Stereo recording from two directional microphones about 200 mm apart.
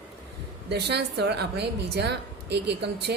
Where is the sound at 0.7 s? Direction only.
55° right (ahead or behind).